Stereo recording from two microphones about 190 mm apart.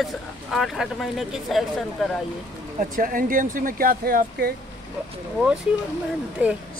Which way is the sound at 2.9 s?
45° right (ahead or behind).